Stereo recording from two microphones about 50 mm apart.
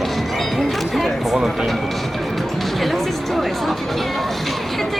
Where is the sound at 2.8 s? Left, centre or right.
Centre.